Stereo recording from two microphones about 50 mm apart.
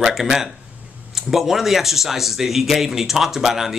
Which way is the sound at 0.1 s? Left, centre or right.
Centre.